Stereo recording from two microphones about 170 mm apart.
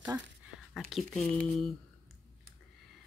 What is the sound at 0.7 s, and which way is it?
Speech, centre (ahead or behind).